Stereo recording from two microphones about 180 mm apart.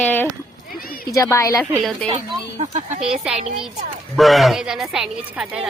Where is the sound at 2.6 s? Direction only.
40° right (ahead or behind).